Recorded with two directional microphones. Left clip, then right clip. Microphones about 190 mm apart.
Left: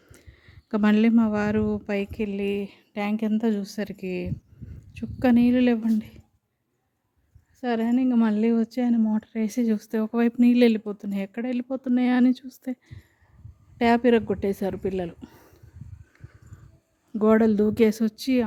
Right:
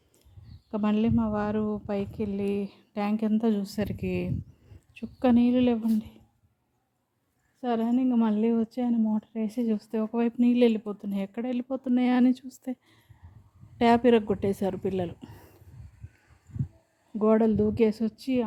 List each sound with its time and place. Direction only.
0.7 s a woman's voice: 40° left (ahead or behind); by 4.4 s 5° left (ahead or behind)
4.9 s a woman's voice: 20° left (ahead or behind)
7.6 s a woman's voice: 25° left (ahead or behind)
17.2 s speech: 30° left (ahead or behind)